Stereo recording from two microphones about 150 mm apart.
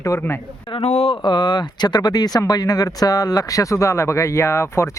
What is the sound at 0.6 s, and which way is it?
Speech, 40° left (ahead or behind).